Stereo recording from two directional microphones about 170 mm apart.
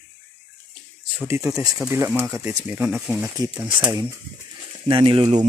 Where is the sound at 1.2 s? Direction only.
15° right (ahead or behind).